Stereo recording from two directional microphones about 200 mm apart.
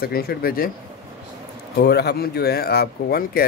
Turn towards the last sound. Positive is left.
turn(degrees=50)  # may be behind; listen again after turning